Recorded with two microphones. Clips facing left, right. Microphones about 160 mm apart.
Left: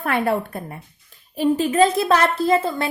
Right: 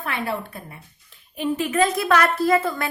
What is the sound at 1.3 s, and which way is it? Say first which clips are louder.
A woman's voice: left 4 dB; 35° left (ahead or behind).